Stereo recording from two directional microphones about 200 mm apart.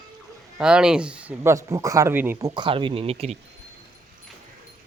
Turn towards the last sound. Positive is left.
turn(degrees=-30)  # may be behind; listen again after turning